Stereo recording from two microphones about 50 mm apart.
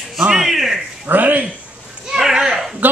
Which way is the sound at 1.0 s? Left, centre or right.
Right.